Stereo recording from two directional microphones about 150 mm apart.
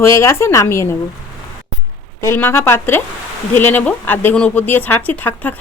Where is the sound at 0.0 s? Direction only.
20° left (ahead or behind).